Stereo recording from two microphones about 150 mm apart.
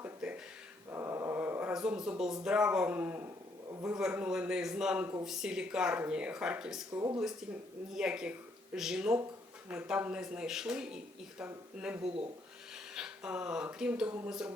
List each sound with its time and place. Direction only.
0.0 s a sound: 10° right (ahead or behind)
0.9 s mantra: 15° right (ahead or behind)
1.7 s speech: 5° right (ahead or behind)